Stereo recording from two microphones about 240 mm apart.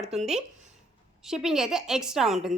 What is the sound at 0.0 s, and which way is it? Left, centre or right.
A woman's voice, centre.